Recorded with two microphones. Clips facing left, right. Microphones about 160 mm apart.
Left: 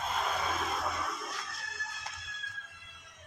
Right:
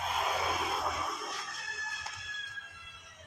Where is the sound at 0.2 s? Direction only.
10° right (ahead or behind).